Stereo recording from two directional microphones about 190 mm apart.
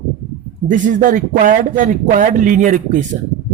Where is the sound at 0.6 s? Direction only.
45° right (ahead or behind).